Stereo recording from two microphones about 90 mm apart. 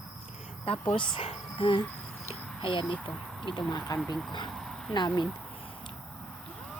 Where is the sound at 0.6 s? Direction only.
90° left.